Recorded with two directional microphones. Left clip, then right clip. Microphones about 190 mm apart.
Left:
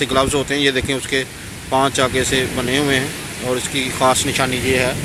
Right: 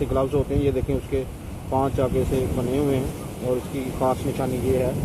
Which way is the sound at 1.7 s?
40° left (ahead or behind).